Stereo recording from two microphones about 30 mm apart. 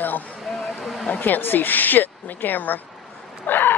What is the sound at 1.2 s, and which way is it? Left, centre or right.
Speech, left.